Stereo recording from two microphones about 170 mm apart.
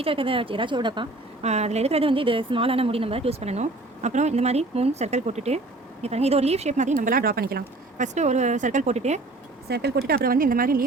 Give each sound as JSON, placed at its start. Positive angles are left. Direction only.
{"t": 0.0, "sound": "a woman's voice", "side_deg": -30}
{"t": 1.4, "sound": "a woman's voice", "side_deg": -40}
{"t": 8.0, "sound": "speech", "side_deg": -45}
{"t": 9.6, "sound": "speech", "side_deg": -75}
{"t": 10.1, "sound": "a woman's voice", "side_deg": -60}